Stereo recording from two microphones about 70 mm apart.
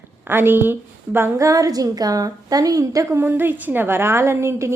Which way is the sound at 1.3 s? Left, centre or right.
Right.